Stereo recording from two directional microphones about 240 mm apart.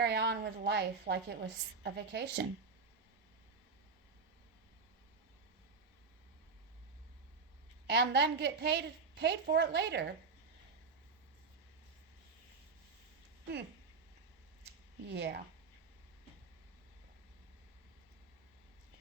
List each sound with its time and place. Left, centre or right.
0.0 s a woman's voice: right
7.9 s a woman's voice: right
15.0 s a woman's voice: right